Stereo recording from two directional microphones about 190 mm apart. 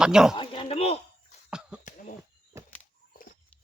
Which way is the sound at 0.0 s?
5° right (ahead or behind).